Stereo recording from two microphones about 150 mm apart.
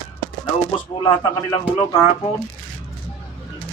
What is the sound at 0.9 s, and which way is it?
A man's voice, 35° left (ahead or behind).